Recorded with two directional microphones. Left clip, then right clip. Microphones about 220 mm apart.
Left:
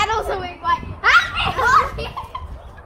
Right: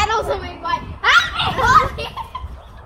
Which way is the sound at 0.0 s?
20° left (ahead or behind).